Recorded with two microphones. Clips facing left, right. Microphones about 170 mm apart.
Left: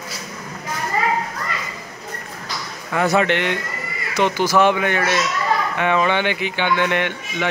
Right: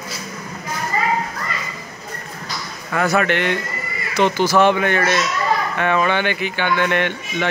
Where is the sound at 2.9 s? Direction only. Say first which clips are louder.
Even; 25° left (ahead or behind).